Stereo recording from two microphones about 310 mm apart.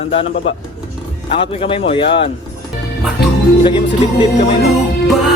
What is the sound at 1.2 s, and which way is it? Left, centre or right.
Speech, centre.